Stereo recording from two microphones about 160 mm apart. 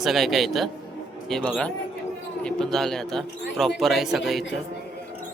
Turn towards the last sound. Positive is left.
turn(degrees=0)  # may be behind; listen again after turning